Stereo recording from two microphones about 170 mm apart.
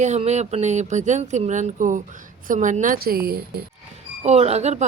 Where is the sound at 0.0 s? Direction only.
40° right (ahead or behind); by 3.6 s 65° right (ahead or behind).